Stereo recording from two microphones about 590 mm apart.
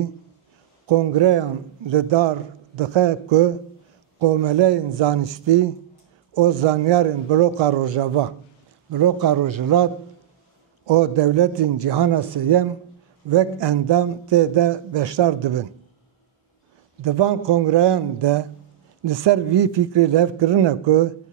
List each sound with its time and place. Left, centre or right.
0.8 s a man's voice: right
8.9 s a man's voice: right
10.9 s a man's voice: right
17.0 s a man's voice: right